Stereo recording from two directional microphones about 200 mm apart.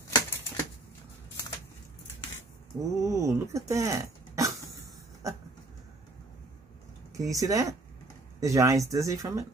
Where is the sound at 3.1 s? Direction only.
15° right (ahead or behind).